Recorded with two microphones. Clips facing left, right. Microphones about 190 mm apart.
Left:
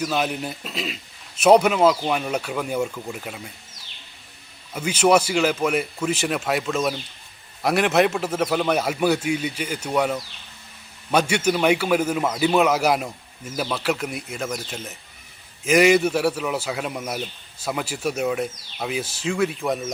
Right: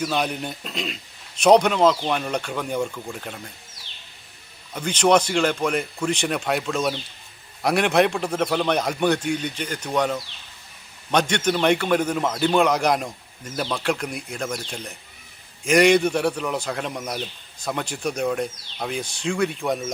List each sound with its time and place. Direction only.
0.0 s a man's voice: centre (ahead or behind)
4.7 s a man's voice: 5° left (ahead or behind)